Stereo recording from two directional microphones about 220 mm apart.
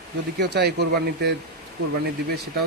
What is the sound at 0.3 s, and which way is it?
Speech, 50° right (ahead or behind).